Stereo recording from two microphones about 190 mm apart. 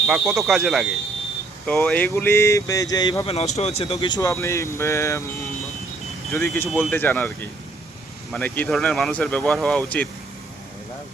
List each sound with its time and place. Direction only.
0.1 s speech: centre (ahead or behind); by 3.3 s 20° left (ahead or behind)
3.3 s speech: 35° left (ahead or behind); by 5.2 s 15° left (ahead or behind)
6.3 s speech: 10° left (ahead or behind)
8.3 s speech: 10° left (ahead or behind)